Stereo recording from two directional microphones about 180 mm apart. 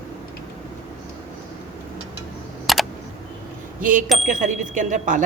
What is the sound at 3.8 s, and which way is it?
Speech, 50° right (ahead or behind).